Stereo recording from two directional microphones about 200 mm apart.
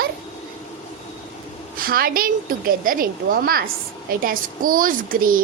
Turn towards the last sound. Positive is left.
turn(degrees=-45)  # may be behind; listen again after turning